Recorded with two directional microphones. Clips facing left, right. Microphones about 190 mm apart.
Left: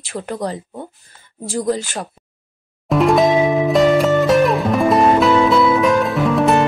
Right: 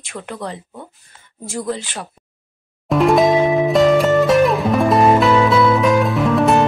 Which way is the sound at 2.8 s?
Centre (ahead or behind).